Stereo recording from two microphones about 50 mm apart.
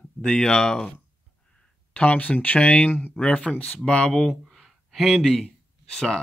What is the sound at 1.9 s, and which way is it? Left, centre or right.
Speech, left.